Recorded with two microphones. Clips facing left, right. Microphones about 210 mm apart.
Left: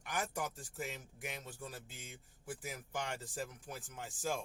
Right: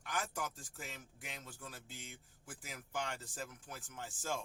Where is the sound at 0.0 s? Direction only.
15° left (ahead or behind).